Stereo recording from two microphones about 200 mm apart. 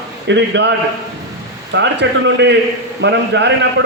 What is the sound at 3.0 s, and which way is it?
Speech, 60° right (ahead or behind).